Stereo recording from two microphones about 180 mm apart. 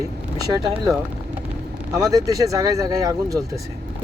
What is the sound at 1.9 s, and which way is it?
Speech, 20° right (ahead or behind).